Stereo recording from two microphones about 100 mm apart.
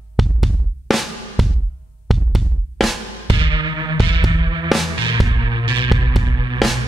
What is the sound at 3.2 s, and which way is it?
Music, 55° right (ahead or behind).